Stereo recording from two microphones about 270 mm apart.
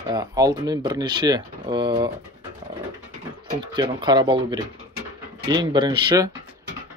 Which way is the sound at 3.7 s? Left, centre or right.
Centre.